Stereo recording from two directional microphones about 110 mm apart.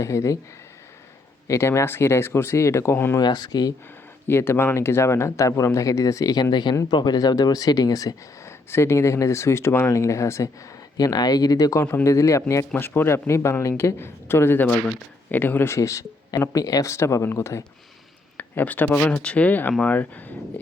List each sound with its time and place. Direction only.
0.0 s speech: 30° left (ahead or behind)
1.5 s speech: 25° left (ahead or behind)
3.2 s speech: 40° left (ahead or behind)
4.3 s speech: 20° left (ahead or behind)
11.8 s speech: 20° left (ahead or behind)